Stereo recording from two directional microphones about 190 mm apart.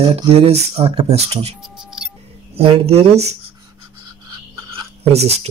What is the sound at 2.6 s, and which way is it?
Speech, 30° right (ahead or behind).